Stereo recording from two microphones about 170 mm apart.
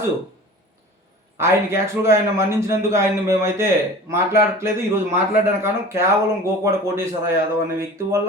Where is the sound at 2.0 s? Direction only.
15° right (ahead or behind).